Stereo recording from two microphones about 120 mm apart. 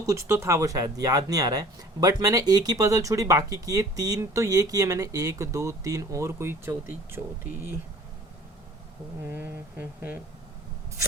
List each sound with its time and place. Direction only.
0.0 s speech: 25° right (ahead or behind)
9.2 s speech: 15° right (ahead or behind)